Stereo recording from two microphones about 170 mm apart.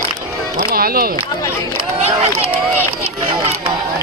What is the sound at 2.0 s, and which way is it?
Speech, 40° right (ahead or behind).